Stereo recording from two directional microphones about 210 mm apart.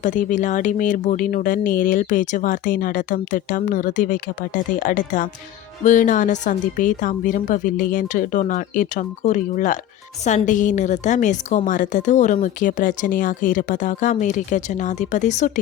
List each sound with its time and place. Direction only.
0.0 s a woman's voice: 35° left (ahead or behind)